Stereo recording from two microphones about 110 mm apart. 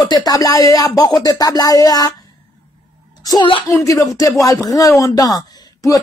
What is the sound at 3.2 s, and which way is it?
A child's voice, 35° left (ahead or behind).